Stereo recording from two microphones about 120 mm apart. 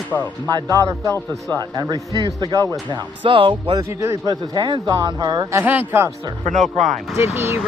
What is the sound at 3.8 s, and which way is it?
Speech, 25° right (ahead or behind).